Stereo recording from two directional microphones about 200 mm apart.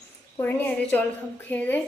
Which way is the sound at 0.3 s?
10° left (ahead or behind).